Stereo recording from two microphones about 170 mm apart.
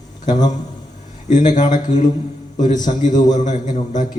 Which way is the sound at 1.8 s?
45° left (ahead or behind).